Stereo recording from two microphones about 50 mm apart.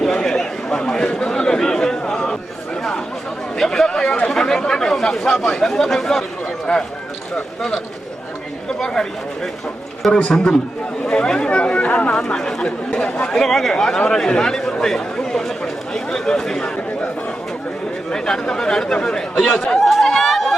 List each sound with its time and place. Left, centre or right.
0.0 s chatter: centre
3.6 s speech: centre
6.7 s speech: centre
8.8 s speech: centre
18.1 s speech: centre
19.8 s chatter: centre
20.1 s a sound: centre